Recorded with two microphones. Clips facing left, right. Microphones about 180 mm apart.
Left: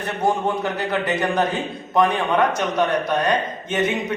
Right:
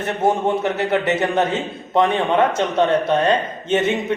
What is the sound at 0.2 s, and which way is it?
A man's voice, 25° right (ahead or behind).